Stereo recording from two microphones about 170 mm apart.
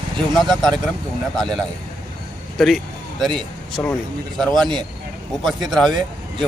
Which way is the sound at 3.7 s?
5° left (ahead or behind).